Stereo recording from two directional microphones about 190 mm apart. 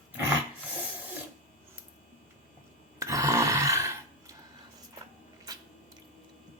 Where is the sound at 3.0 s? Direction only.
15° right (ahead or behind).